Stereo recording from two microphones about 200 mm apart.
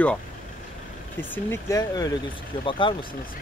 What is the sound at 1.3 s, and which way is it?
Speech, 15° left (ahead or behind).